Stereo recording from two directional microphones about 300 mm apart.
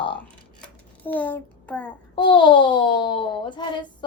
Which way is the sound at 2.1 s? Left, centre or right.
Centre.